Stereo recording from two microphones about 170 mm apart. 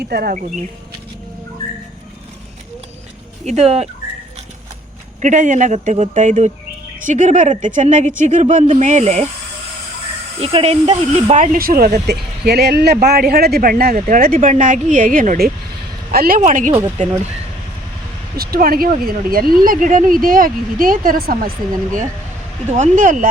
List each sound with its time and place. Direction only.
0.0 s speech: 70° right (ahead or behind)
3.4 s speech: 40° right (ahead or behind)
5.2 s speech: 45° right (ahead or behind)
10.4 s speech: 35° right (ahead or behind); by 16.4 s 60° right (ahead or behind)
16.4 s speech: 45° right (ahead or behind)
18.3 s speech: 60° right (ahead or behind)
22.8 s speech: 50° right (ahead or behind)